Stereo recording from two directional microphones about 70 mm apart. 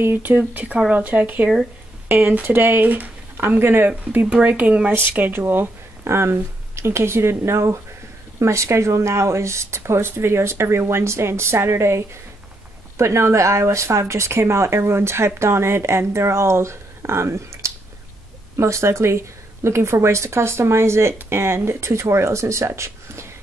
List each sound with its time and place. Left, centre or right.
0.0 s speech: right